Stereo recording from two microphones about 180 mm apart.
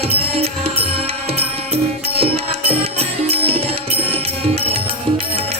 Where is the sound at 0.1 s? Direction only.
35° right (ahead or behind).